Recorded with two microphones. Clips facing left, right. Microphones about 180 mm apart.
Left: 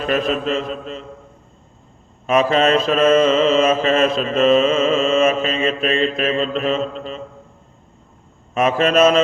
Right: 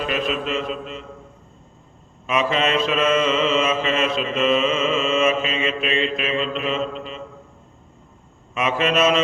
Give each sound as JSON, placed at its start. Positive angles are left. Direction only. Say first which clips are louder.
{"t": 0.0, "sound": "mantra", "louder": "left 4 dB", "side_deg": 40}
{"t": 2.2, "sound": "mantra", "louder": "left 6 dB", "side_deg": 40}
{"t": 8.5, "sound": "mantra", "louder": "left 5 dB", "side_deg": 40}